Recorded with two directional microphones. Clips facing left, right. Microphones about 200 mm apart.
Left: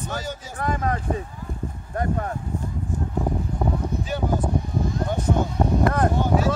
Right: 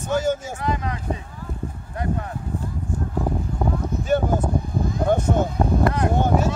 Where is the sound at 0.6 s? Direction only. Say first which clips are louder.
Left 1 dB; 50° left (ahead or behind).